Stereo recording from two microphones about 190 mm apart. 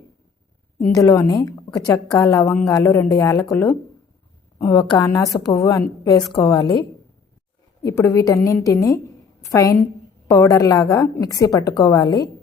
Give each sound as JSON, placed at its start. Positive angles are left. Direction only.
{"t": 0.8, "sound": "a woman's voice", "side_deg": 15}
{"t": 7.9, "sound": "a woman's voice", "side_deg": 15}